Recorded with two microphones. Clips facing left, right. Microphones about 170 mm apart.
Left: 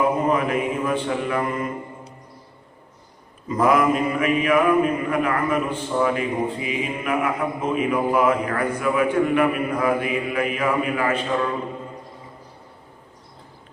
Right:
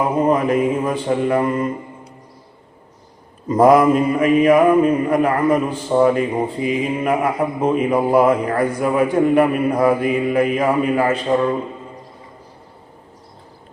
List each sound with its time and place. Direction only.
0.3 s a man's voice: 35° right (ahead or behind)
3.5 s a man's voice: 40° right (ahead or behind)